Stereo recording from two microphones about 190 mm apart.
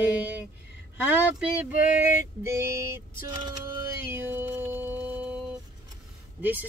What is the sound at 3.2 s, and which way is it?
Vehicle, 20° right (ahead or behind).